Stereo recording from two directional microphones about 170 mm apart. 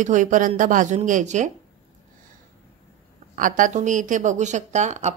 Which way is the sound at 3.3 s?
50° right (ahead or behind).